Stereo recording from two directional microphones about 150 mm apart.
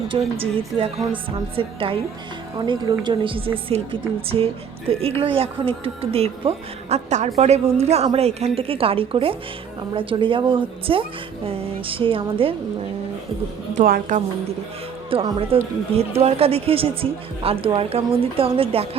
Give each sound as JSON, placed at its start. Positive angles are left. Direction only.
{"t": 0.1, "sound": "a woman's voice", "side_deg": -35}
{"t": 13.8, "sound": "a woman's voice", "side_deg": -70}
{"t": 15.1, "sound": "a woman's voice", "side_deg": -40}